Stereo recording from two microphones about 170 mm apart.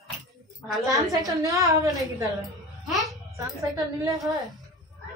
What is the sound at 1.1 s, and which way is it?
Speech, 20° right (ahead or behind).